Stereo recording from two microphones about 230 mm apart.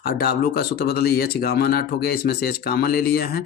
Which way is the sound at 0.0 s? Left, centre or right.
Left.